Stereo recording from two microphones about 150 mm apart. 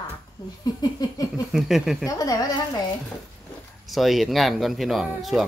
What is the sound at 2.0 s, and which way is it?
Speech, 25° left (ahead or behind).